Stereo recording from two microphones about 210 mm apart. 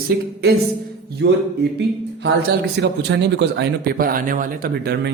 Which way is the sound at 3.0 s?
55° right (ahead or behind).